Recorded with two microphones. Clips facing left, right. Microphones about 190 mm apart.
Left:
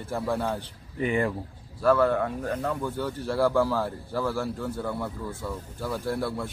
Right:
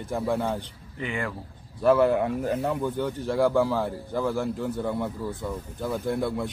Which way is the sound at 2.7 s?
15° right (ahead or behind).